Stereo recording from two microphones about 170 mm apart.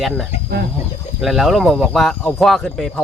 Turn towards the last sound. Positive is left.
turn(degrees=5)  # may be behind; listen again after turning